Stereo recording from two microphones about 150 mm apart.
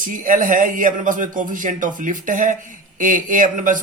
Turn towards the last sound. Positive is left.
turn(degrees=-60)  # may be behind; listen again after turning